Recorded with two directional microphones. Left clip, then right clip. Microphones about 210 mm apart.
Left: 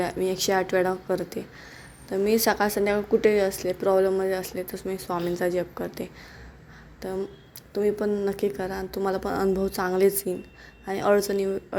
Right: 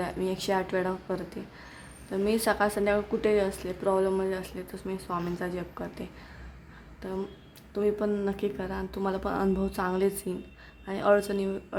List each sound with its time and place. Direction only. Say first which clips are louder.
0.0 s a woman's voice: left 5 dB; 10° left (ahead or behind)
7.7 s a woman's voice: left 3 dB; 5° left (ahead or behind)